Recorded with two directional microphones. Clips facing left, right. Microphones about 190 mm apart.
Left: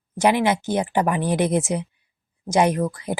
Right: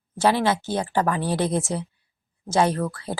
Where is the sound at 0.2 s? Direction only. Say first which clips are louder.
Left 2 dB; 15° left (ahead or behind).